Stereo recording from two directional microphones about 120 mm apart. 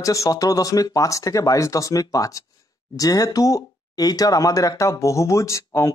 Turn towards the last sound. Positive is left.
turn(degrees=25)  # may be behind; listen again after turning